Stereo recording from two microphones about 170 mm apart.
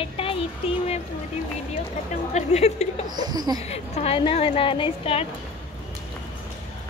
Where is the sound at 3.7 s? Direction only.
35° left (ahead or behind).